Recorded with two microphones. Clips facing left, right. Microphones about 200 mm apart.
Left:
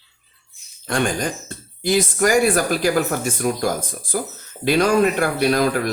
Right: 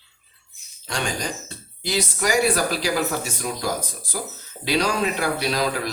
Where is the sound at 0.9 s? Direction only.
55° left (ahead or behind).